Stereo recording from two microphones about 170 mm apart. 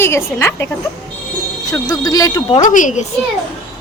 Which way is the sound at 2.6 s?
50° left (ahead or behind).